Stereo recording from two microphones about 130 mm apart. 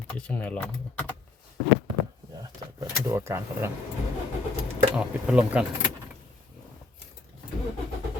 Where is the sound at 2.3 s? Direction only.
30° right (ahead or behind).